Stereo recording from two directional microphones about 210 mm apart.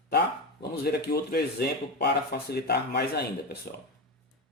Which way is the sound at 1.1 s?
50° left (ahead or behind).